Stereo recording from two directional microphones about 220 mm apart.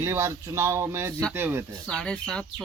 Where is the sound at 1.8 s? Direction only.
5° left (ahead or behind).